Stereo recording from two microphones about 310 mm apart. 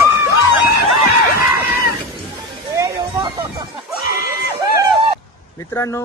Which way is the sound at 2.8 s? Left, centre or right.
Centre.